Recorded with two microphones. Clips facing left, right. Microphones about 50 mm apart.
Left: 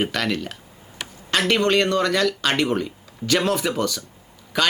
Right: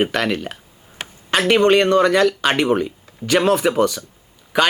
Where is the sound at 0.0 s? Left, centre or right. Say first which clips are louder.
Right 4 dB; centre.